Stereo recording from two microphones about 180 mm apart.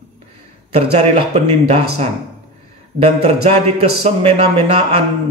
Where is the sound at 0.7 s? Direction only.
35° right (ahead or behind).